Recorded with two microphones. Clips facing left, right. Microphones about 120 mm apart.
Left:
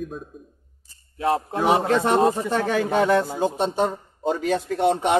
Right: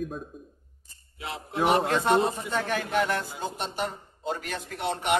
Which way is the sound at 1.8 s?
85° left.